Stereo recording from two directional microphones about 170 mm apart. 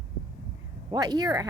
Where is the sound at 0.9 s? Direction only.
20° right (ahead or behind).